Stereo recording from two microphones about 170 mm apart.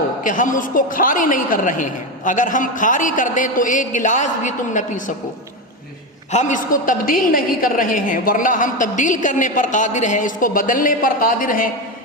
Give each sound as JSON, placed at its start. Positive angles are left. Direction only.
{"t": 0.2, "sound": "a woman's voice", "side_deg": 50}
{"t": 6.3, "sound": "a woman's voice", "side_deg": 45}